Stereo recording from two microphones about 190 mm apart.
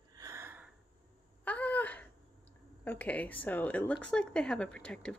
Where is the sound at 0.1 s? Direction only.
15° right (ahead or behind).